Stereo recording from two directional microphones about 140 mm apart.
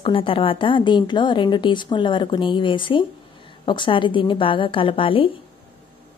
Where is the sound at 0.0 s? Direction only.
40° left (ahead or behind).